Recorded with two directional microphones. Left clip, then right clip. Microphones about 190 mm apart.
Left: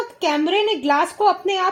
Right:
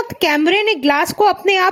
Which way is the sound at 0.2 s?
35° right (ahead or behind).